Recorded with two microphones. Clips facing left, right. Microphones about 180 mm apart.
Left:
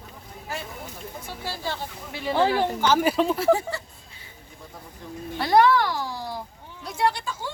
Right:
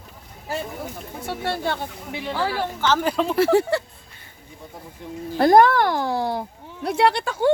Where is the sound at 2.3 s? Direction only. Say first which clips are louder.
Left 4 dB; 20° left (ahead or behind); by 3.3 s 5° left (ahead or behind).